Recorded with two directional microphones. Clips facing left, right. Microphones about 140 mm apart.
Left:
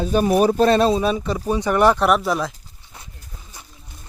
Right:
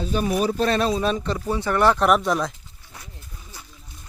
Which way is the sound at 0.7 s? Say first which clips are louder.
Left 5 dB; 30° left (ahead or behind).